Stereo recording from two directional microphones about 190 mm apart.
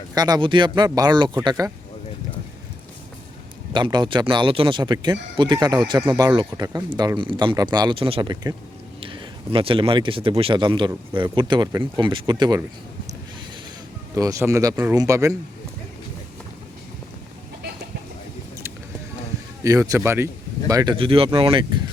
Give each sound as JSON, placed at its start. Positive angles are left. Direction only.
{"t": 0.1, "sound": "speech", "side_deg": -20}
{"t": 3.7, "sound": "speech", "side_deg": -25}
{"t": 14.2, "sound": "speech", "side_deg": -15}
{"t": 19.6, "sound": "speech", "side_deg": -15}